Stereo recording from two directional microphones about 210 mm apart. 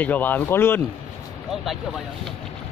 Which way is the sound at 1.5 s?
Centre (ahead or behind).